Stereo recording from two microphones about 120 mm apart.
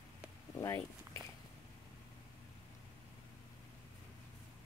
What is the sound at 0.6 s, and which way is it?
Speech, 25° left (ahead or behind).